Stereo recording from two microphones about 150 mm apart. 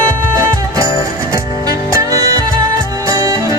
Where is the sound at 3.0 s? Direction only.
25° right (ahead or behind).